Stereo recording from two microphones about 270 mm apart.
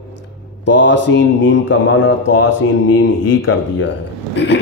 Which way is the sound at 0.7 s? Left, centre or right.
Left.